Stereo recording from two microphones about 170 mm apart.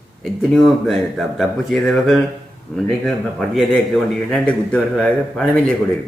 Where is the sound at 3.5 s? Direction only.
5° left (ahead or behind).